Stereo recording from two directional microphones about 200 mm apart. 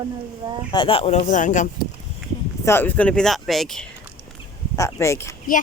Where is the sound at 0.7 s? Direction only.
25° left (ahead or behind).